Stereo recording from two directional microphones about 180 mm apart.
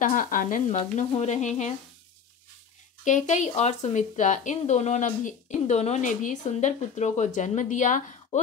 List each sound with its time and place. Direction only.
0.0 s speech: 50° left (ahead or behind)
0.7 s speech: 35° left (ahead or behind)
3.0 s speech: 45° left (ahead or behind)